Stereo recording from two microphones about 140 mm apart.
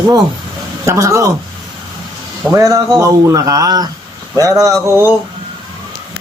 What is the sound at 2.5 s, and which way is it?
A man's voice, 20° right (ahead or behind).